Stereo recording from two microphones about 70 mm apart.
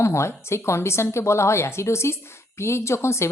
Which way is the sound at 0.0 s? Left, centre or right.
Left.